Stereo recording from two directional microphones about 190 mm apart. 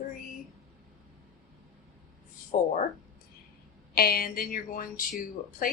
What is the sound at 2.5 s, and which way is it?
Speech, 45° left (ahead or behind).